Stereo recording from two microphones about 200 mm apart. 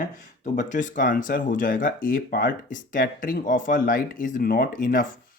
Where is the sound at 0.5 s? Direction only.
40° left (ahead or behind).